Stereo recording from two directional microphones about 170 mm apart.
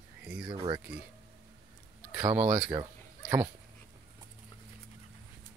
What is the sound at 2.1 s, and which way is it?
Speech, 15° right (ahead or behind).